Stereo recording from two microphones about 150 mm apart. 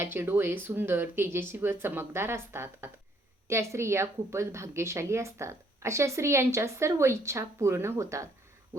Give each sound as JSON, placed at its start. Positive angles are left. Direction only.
{"t": 0.0, "sound": "a woman's voice", "side_deg": -15}